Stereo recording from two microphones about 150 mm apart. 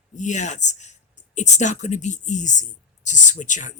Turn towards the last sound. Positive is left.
turn(degrees=55)  # may be behind; listen again after turning